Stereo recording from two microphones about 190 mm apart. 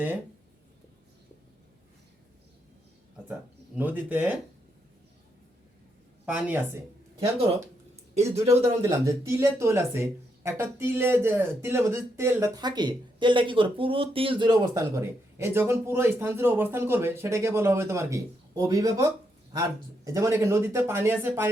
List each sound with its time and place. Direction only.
3.8 s speech: 10° right (ahead or behind)
6.2 s speech: 10° right (ahead or behind)
8.1 s speech: 35° right (ahead or behind)
8.8 s speech: 15° right (ahead or behind)
20.1 s speech: 15° right (ahead or behind)